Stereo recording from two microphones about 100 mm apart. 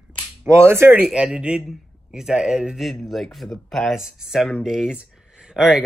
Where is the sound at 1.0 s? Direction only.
10° right (ahead or behind).